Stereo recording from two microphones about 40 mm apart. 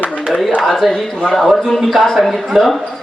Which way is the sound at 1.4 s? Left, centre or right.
Centre.